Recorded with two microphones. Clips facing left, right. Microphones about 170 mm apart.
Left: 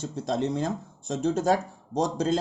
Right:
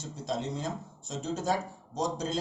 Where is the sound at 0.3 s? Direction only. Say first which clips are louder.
Left 6 dB; 60° left (ahead or behind).